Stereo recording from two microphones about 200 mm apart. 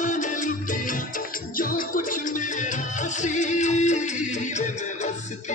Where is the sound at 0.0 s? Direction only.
40° left (ahead or behind).